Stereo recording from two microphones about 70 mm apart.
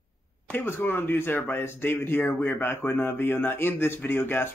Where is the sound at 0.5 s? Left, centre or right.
Left.